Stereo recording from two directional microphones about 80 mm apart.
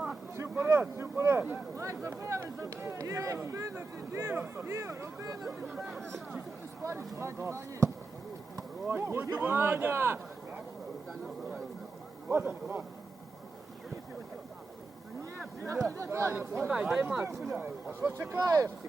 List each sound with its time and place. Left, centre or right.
0.5 s speech: right
1.7 s speech: right
5.7 s speech: centre
6.8 s speech: right
8.9 s speech: right
12.3 s speech: right
15.6 s speech: right
16.6 s speech: centre
17.2 s speech: right